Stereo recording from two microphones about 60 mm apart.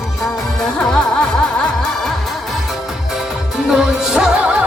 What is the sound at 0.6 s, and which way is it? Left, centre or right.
Music, centre.